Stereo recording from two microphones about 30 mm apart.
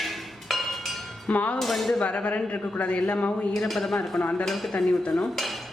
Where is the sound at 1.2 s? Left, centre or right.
Left.